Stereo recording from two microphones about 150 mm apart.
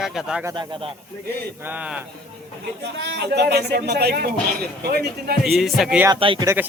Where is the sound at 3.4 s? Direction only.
90° right.